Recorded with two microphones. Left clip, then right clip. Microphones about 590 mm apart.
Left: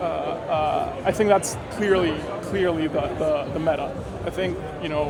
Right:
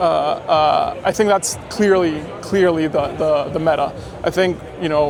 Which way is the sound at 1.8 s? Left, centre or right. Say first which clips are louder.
Right 6 dB; right.